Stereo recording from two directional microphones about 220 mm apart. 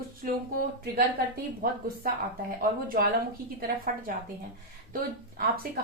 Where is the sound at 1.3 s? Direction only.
40° right (ahead or behind).